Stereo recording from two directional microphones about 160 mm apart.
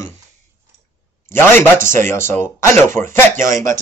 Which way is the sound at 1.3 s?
15° left (ahead or behind).